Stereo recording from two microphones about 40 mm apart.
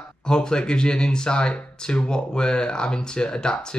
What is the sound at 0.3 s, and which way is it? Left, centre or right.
Speech, centre.